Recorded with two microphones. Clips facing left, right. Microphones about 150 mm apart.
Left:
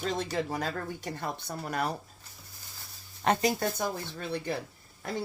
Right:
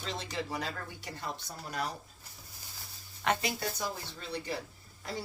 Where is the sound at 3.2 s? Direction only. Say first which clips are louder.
Left 5 dB; 40° left (ahead or behind).